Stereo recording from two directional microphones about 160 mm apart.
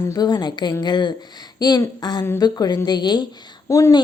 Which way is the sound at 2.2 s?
15° left (ahead or behind).